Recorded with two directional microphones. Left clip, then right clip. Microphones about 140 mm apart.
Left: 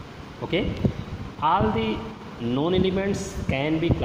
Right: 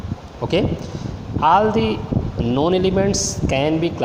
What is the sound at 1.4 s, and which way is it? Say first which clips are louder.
Speech: right 7 dB; 50° right (ahead or behind).